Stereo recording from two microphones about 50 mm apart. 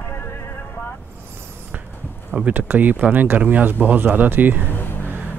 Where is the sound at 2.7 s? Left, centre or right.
Right.